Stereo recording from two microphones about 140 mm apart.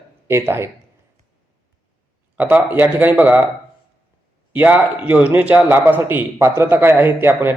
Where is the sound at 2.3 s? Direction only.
10° right (ahead or behind).